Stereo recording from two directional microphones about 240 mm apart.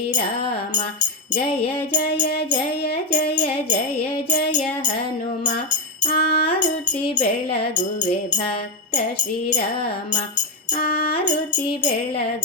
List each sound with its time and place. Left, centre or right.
1.3 s music: left
2.0 s music: left
4.4 s music: left
6.0 s music: left
6.4 s music: left
10.8 s music: left